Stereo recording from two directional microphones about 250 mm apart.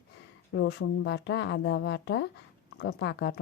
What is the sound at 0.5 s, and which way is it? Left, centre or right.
Speech, left.